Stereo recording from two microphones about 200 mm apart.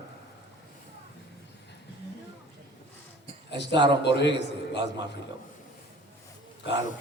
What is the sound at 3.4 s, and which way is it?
A man's voice, 60° left (ahead or behind).